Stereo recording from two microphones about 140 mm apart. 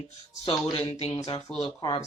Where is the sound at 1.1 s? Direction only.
25° left (ahead or behind).